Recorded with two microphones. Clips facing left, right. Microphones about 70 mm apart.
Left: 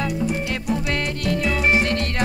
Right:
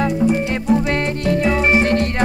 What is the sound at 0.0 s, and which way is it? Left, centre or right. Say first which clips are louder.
Music: right 7 dB; right.